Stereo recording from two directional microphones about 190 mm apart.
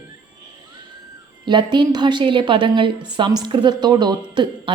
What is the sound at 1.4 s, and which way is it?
A woman's voice, 25° right (ahead or behind).